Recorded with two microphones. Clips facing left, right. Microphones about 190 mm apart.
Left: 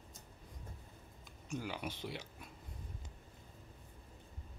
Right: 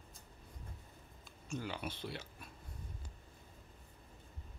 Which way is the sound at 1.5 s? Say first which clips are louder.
Even; 15° left (ahead or behind).